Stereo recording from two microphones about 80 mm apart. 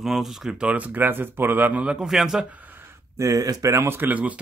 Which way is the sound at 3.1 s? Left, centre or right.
Right.